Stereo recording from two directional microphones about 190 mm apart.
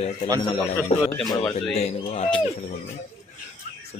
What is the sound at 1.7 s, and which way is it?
Speech, 35° left (ahead or behind).